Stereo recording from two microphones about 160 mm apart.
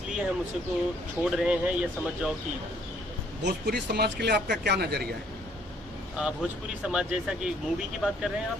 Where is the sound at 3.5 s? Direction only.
90° right.